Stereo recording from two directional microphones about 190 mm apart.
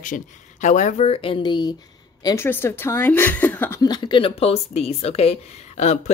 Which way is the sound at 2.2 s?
10° left (ahead or behind).